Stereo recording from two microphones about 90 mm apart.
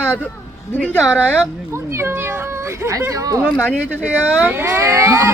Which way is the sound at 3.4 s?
10° left (ahead or behind).